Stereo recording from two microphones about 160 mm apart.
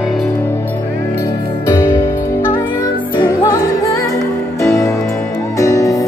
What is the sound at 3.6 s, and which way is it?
Music, 20° left (ahead or behind).